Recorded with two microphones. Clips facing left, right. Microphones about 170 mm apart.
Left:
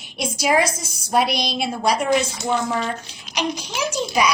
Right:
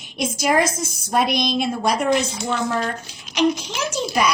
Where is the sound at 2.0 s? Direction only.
10° left (ahead or behind).